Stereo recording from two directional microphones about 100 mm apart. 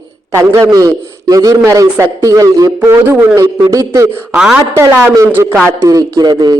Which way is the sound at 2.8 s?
25° right (ahead or behind).